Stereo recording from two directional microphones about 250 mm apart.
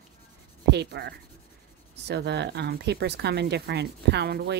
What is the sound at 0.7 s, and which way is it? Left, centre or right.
Speech, right.